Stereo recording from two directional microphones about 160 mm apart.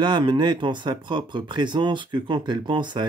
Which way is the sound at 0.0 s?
30° right (ahead or behind).